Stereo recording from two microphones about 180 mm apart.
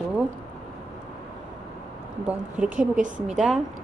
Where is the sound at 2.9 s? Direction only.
45° right (ahead or behind).